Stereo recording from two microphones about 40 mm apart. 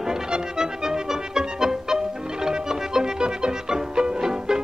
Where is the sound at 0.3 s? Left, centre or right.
Centre.